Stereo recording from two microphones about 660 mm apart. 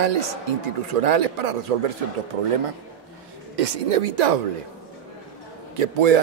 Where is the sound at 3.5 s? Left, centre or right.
Right.